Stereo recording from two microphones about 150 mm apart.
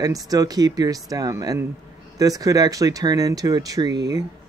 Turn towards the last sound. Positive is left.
turn(degrees=-25)  # may be behind; listen again after turning